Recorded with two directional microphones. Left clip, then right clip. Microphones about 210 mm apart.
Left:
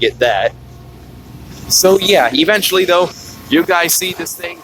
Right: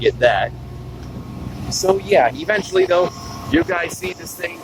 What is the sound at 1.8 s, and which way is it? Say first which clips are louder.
Speech: left 4 dB; 60° left (ahead or behind).